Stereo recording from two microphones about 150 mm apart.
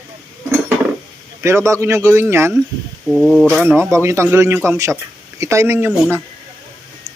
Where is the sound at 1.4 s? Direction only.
20° right (ahead or behind).